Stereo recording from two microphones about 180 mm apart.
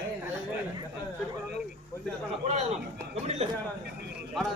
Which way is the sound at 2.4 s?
40° right (ahead or behind).